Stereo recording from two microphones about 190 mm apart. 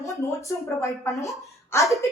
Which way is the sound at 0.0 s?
15° left (ahead or behind).